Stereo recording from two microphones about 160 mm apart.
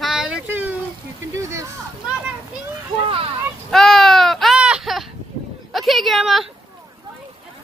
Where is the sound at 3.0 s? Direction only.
35° right (ahead or behind).